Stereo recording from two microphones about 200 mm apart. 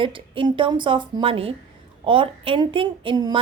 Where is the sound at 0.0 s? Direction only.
25° right (ahead or behind).